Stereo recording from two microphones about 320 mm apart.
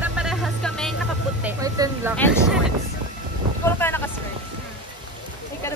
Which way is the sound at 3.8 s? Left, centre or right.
Centre.